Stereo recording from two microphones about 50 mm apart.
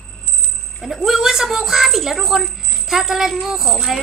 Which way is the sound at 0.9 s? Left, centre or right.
Centre.